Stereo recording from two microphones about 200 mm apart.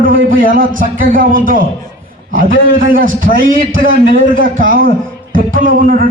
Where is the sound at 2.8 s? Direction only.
45° right (ahead or behind).